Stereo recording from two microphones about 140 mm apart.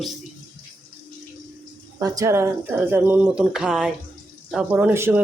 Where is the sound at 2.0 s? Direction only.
20° right (ahead or behind); by 3.9 s 5° right (ahead or behind).